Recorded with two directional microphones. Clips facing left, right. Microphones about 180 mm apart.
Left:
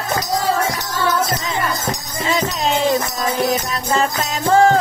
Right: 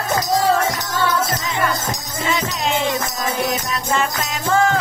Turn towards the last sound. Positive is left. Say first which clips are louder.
# left 4 dB
turn(degrees=35)  # may be behind; listen again after turning